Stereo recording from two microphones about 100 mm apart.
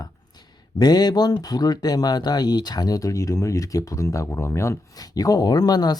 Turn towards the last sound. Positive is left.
turn(degrees=40)  # may be behind; listen again after turning